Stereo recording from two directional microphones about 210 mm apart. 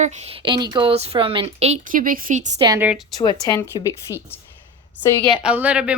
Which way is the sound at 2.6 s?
10° right (ahead or behind).